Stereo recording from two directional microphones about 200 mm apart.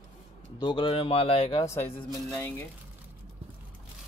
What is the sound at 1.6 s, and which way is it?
A man's voice, 15° left (ahead or behind).